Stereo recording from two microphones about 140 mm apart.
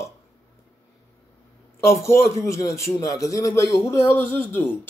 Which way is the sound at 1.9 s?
20° left (ahead or behind).